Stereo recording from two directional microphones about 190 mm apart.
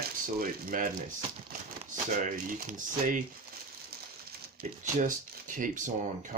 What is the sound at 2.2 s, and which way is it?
Speech, 45° right (ahead or behind).